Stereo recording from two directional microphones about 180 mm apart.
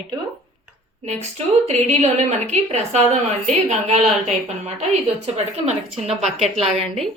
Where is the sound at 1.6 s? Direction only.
40° right (ahead or behind).